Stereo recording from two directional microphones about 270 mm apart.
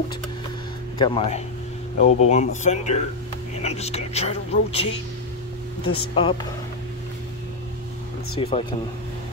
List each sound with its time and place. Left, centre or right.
0.9 s speech: centre
5.9 s speech: centre
8.4 s speech: left